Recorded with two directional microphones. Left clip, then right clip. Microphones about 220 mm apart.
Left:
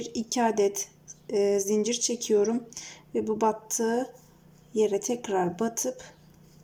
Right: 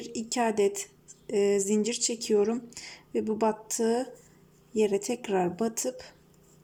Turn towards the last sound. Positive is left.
turn(degrees=-5)  # may be behind; listen again after turning